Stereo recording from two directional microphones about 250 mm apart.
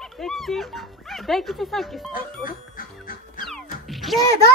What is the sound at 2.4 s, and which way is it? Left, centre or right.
Music, left.